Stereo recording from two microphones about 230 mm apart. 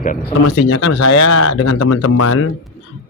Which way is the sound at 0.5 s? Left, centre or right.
Left.